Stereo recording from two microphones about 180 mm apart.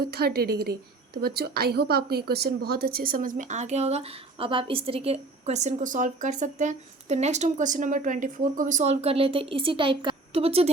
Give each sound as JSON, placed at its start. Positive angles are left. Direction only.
{"t": 0.0, "sound": "a woman's voice", "side_deg": -60}